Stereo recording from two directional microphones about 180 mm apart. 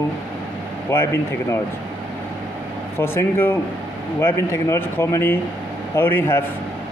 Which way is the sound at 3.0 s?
15° left (ahead or behind).